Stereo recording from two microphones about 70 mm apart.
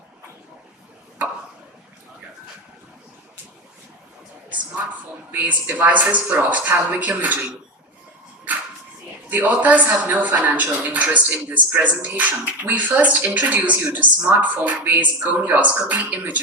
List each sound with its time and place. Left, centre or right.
4.4 s a sound: right
5.3 s speech: right
9.3 s speech: right